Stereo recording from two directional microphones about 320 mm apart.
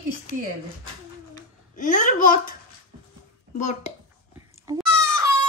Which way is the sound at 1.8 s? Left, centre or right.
Left.